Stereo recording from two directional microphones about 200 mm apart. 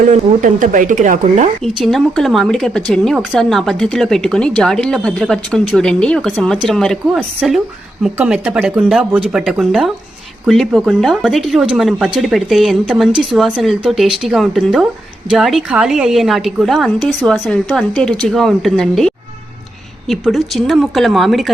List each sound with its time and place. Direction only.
0.1 s speech: 35° right (ahead or behind)
1.6 s speech: centre (ahead or behind)